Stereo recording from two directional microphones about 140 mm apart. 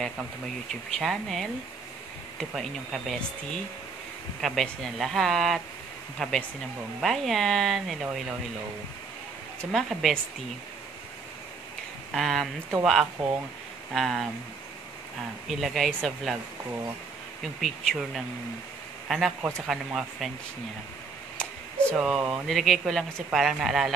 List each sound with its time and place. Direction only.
0.7 s speech: centre (ahead or behind)
9.6 s speech: centre (ahead or behind)
12.1 s speech: centre (ahead or behind)
15.4 s speech: centre (ahead or behind)
17.4 s a man's voice: centre (ahead or behind)
21.4 s a sound: 10° left (ahead or behind)
21.9 s speech: 5° right (ahead or behind)